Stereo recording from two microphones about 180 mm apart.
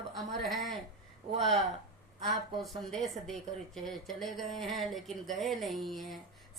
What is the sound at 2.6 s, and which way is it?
Speech, centre (ahead or behind).